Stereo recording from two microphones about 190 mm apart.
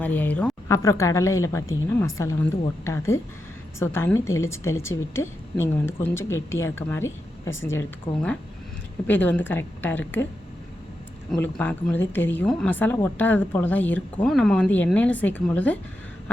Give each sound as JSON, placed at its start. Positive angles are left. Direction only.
{"t": 0.0, "sound": "speech", "side_deg": 10}
{"t": 8.1, "sound": "speech", "side_deg": 35}
{"t": 9.0, "sound": "speech", "side_deg": 10}
{"t": 11.3, "sound": "speech", "side_deg": 5}